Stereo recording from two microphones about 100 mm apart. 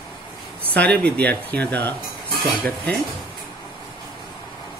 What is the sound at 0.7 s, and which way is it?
Speech, 10° left (ahead or behind).